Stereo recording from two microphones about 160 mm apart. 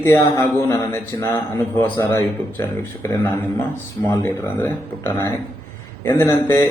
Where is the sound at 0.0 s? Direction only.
15° left (ahead or behind).